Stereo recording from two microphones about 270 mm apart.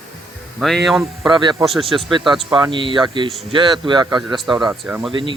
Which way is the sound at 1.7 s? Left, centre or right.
Centre.